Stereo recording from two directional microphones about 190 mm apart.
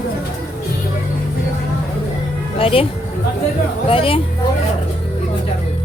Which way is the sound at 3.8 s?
30° left (ahead or behind).